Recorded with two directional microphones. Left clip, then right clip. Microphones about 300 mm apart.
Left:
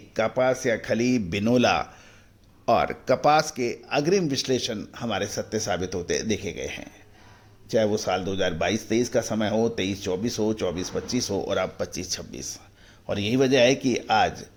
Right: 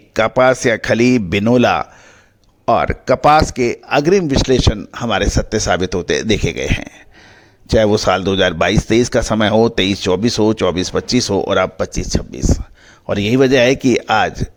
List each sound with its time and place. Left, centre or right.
0.1 s a man's voice: right